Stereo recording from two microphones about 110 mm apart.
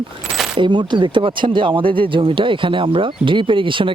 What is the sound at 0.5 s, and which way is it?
Speech, 45° right (ahead or behind).